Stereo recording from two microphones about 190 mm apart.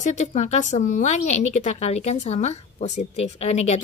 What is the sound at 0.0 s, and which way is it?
A woman's voice, 40° left (ahead or behind).